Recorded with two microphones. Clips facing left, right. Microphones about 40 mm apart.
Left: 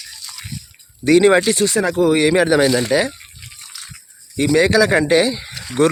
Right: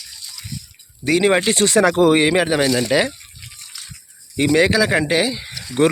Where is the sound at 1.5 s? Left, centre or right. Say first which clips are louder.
Right 2 dB; right.